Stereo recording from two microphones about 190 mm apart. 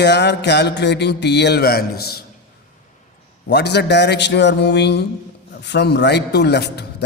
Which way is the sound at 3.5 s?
60° left (ahead or behind).